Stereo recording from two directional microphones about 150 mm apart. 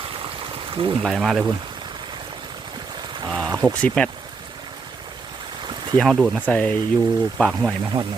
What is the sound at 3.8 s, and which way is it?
Speech, 5° left (ahead or behind).